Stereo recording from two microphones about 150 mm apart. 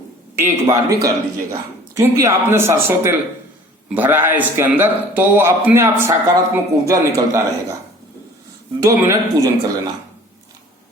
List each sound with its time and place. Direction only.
0.3 s a man's voice: 20° right (ahead or behind)
8.8 s speech: 20° right (ahead or behind)